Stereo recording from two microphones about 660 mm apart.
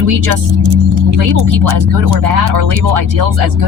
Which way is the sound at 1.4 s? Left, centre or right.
Right.